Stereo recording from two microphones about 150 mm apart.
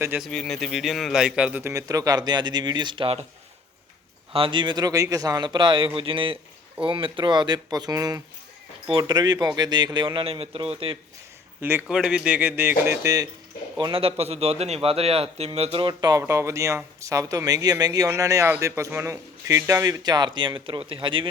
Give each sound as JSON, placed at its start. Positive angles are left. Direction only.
{"t": 0.2, "sound": "a man's voice", "side_deg": 5}
{"t": 1.7, "sound": "a man's voice", "side_deg": -25}
{"t": 4.3, "sound": "a man's voice", "side_deg": -35}
{"t": 11.6, "sound": "speech", "side_deg": -15}
{"t": 13.7, "sound": "a man's voice", "side_deg": -35}